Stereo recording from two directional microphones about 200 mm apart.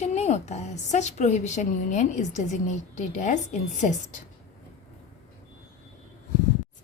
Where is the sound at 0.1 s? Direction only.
35° left (ahead or behind).